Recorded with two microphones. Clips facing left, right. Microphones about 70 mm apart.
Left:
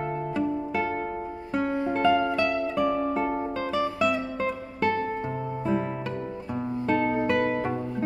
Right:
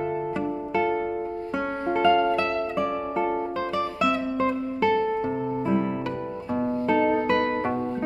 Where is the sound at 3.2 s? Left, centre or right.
Centre.